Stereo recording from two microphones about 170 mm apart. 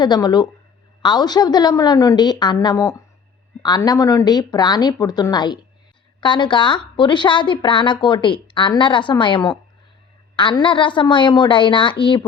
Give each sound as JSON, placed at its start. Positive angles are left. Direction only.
{"t": 0.0, "sound": "a woman's voice", "side_deg": 25}